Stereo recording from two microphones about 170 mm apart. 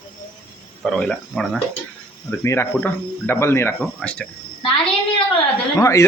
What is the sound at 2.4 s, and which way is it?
Speech, 15° left (ahead or behind).